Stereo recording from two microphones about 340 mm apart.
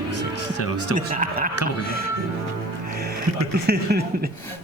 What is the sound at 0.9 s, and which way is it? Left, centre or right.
Speech, right.